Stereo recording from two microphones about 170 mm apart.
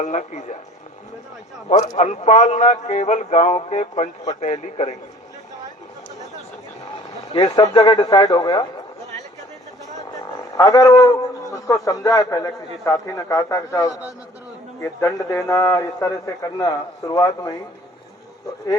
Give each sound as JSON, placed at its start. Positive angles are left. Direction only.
{"t": 0.0, "sound": "a man's voice", "side_deg": 45}
{"t": 2.0, "sound": "a man's voice", "side_deg": 45}
{"t": 7.4, "sound": "a man's voice", "side_deg": 20}
{"t": 9.9, "sound": "a sound", "side_deg": 20}
{"t": 11.5, "sound": "a man's voice", "side_deg": 20}